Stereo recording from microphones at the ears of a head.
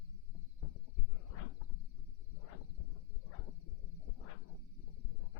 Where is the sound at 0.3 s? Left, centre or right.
Left.